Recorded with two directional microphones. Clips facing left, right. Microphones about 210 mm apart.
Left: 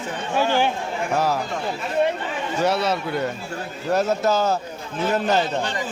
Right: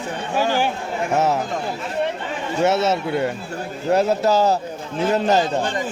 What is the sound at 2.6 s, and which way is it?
A man's voice, 25° right (ahead or behind).